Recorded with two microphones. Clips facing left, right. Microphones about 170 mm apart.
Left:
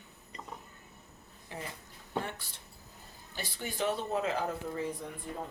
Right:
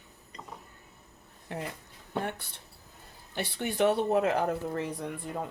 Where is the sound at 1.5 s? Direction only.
60° right (ahead or behind).